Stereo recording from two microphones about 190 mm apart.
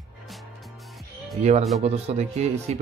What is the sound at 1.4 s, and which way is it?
Speech, 40° right (ahead or behind).